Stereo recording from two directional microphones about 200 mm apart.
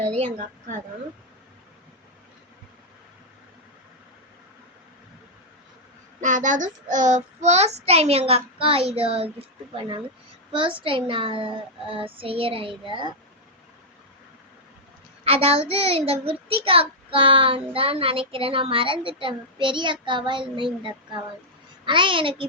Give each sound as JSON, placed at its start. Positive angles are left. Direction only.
{"t": 0.3, "sound": "child singing", "side_deg": -40}
{"t": 6.1, "sound": "child singing", "side_deg": -40}
{"t": 8.3, "sound": "a child's voice", "side_deg": -30}
{"t": 15.2, "sound": "a child's voice", "side_deg": -30}